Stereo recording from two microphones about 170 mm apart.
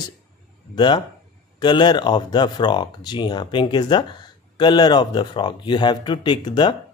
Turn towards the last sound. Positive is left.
turn(degrees=25)  # may be behind; listen again after turning